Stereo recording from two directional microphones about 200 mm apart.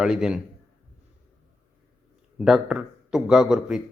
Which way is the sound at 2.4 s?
5° right (ahead or behind).